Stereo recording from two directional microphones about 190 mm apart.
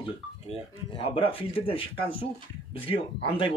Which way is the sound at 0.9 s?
30° left (ahead or behind).